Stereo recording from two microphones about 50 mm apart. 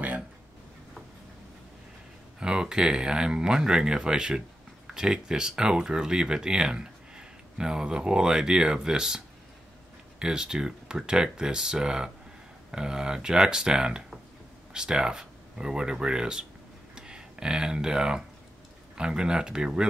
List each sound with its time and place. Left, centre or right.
2.4 s speech: centre